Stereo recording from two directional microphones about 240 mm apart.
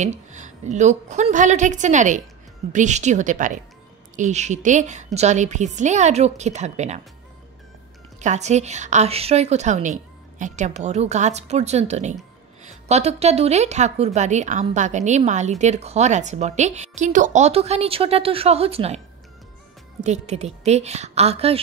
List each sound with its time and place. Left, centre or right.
0.0 s a woman's voice: right
8.2 s speech: right
20.0 s speech: right